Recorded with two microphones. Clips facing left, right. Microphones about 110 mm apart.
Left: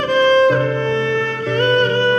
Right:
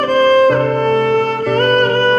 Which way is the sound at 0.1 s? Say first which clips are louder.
Right 2 dB; 45° right (ahead or behind).